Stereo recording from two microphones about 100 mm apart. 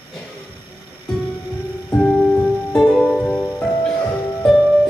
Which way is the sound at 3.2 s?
15° left (ahead or behind).